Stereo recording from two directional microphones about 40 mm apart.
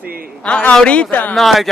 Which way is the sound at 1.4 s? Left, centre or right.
Centre.